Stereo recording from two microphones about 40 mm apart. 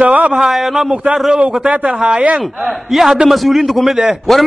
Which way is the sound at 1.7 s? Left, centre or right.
Right.